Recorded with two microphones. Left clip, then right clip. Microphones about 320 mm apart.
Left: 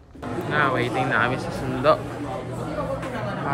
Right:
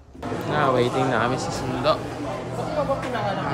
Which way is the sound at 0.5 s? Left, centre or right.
Centre.